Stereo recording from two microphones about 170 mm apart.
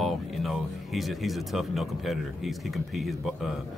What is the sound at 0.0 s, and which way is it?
Speech, centre (ahead or behind).